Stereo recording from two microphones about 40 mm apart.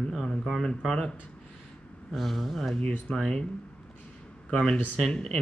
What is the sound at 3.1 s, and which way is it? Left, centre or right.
Speech, left.